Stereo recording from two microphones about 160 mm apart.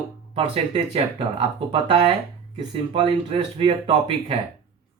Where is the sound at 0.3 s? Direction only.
35° right (ahead or behind).